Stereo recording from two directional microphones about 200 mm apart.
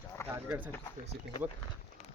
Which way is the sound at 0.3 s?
10° right (ahead or behind).